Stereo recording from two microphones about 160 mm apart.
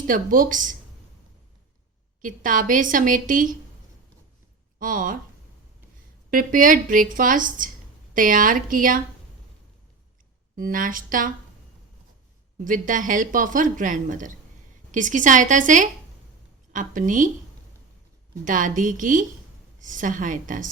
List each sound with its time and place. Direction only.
0.1 s speech: 60° right (ahead or behind)
2.2 s speech: 55° right (ahead or behind)
4.8 s speech: 60° right (ahead or behind)
6.3 s speech: 60° right (ahead or behind)
10.5 s speech: 60° right (ahead or behind)
12.5 s a woman's voice: 55° right (ahead or behind)
18.4 s speech: 55° right (ahead or behind)